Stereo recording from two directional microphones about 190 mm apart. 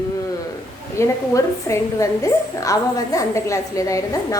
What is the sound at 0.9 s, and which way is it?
A woman's voice, 15° left (ahead or behind).